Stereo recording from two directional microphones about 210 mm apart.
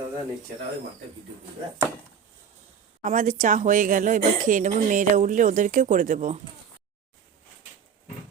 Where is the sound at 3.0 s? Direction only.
40° right (ahead or behind).